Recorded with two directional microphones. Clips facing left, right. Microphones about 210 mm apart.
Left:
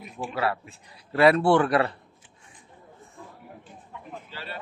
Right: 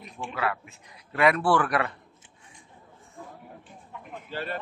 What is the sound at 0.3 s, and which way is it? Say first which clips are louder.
A man's voice: left 2 dB; 30° left (ahead or behind).